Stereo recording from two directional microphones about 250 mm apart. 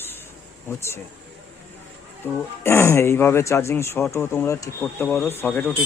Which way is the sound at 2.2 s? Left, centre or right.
Centre.